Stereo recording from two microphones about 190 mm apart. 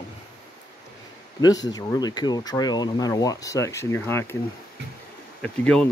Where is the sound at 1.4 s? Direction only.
20° left (ahead or behind).